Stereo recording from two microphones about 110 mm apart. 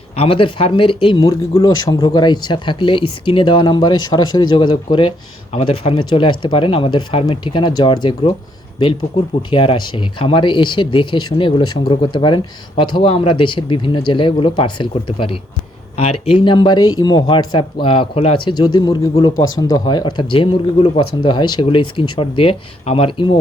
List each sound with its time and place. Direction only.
0.2 s speech: 55° left (ahead or behind)
1.2 s speech: 30° left (ahead or behind); by 5.1 s 50° left (ahead or behind)
5.5 s speech: 65° left (ahead or behind)
7.3 s speech: 45° left (ahead or behind)
9.5 s speech: 50° left (ahead or behind)
16.0 s speech: 70° left (ahead or behind)
16.5 s speech: 45° left (ahead or behind)